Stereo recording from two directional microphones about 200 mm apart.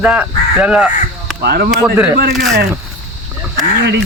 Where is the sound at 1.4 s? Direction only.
50° right (ahead or behind).